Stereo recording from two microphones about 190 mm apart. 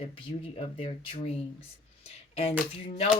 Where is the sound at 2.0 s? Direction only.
35° left (ahead or behind).